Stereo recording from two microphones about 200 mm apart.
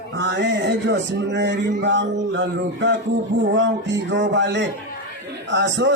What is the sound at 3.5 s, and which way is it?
A man's voice, 65° right (ahead or behind).